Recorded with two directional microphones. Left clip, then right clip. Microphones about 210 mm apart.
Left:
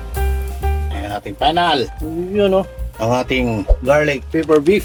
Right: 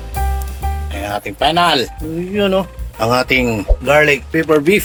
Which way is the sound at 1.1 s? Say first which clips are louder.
Right 2 dB; 5° right (ahead or behind).